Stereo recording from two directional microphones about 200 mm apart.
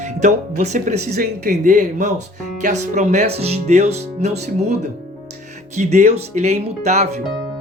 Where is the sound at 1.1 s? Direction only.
45° right (ahead or behind).